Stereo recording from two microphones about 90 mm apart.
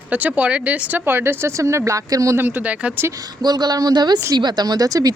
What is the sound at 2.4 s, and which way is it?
Speech, 20° right (ahead or behind).